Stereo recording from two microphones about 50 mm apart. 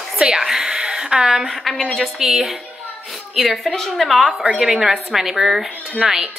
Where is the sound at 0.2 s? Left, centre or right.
Centre.